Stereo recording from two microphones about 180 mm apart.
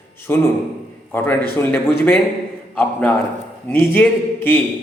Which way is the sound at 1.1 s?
10° left (ahead or behind).